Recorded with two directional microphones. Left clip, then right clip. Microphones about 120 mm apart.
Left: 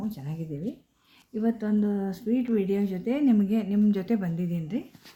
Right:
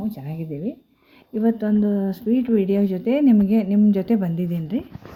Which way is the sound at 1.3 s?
60° right (ahead or behind).